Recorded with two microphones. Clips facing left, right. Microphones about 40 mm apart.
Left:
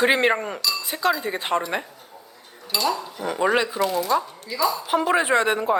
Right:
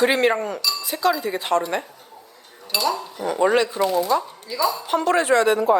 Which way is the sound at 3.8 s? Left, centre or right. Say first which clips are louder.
Right 2 dB; centre.